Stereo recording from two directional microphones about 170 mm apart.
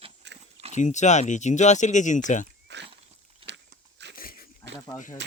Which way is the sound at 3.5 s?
90° right.